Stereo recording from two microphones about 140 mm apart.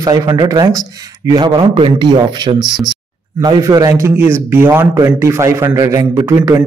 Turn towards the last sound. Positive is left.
turn(degrees=-25)  # may be behind; listen again after turning